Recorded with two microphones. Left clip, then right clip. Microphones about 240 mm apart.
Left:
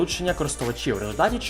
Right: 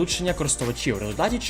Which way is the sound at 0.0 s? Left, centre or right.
Right.